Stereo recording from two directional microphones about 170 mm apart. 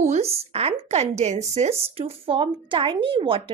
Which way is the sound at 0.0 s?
40° right (ahead or behind).